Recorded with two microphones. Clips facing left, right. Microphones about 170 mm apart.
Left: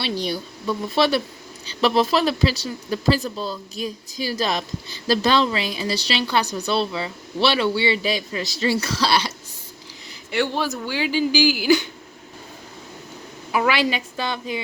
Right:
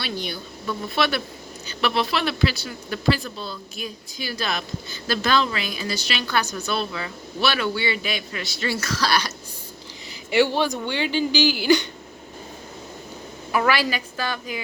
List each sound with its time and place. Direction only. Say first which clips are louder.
0.0 s a woman's voice: left 5 dB; 35° left (ahead or behind)
10.3 s speech: right 3 dB; centre (ahead or behind)
13.5 s a woman's voice: left 1 dB; 15° left (ahead or behind)